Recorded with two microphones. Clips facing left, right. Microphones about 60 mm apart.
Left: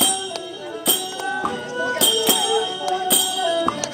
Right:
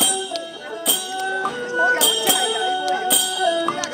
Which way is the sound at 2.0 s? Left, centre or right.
Centre.